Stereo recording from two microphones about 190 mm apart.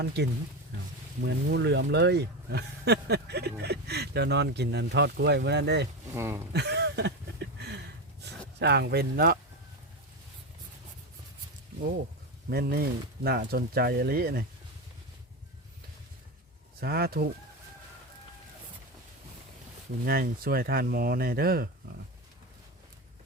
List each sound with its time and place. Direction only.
1.2 s speech: 65° right (ahead or behind)
6.1 s speech: 15° right (ahead or behind)
6.5 s a sound: 60° right (ahead or behind)
12.5 s speech: 55° right (ahead or behind)
16.8 s speech: 55° right (ahead or behind)
20.1 s speech: 50° right (ahead or behind)